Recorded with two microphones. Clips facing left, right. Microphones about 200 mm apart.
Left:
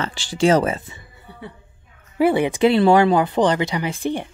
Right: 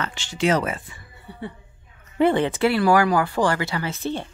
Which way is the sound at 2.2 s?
10° left (ahead or behind).